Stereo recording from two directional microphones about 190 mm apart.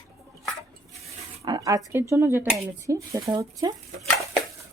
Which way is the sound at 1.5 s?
20° right (ahead or behind).